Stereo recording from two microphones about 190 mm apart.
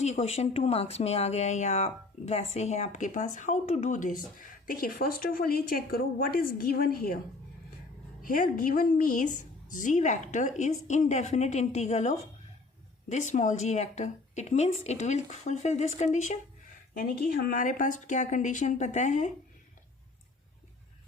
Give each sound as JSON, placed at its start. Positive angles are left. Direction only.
{"t": 0.0, "sound": "speech", "side_deg": 40}
{"t": 8.2, "sound": "speech", "side_deg": 45}